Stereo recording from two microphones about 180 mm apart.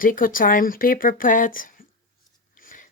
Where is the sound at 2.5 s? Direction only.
50° left (ahead or behind).